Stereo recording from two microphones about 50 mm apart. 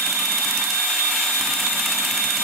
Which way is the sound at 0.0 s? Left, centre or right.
Centre.